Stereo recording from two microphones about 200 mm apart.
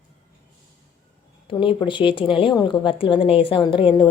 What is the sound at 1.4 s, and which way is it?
Speech, 25° left (ahead or behind).